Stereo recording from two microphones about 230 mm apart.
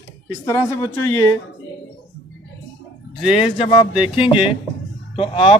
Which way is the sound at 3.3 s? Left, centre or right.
Left.